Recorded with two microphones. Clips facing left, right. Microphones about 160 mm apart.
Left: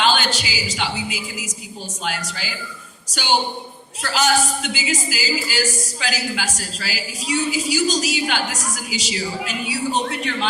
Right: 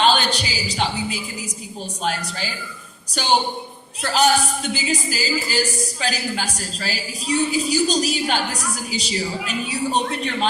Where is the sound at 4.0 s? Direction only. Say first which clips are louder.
Right 3 dB; 35° right (ahead or behind).